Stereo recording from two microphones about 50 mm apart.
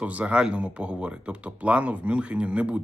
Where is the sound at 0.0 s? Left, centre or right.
Right.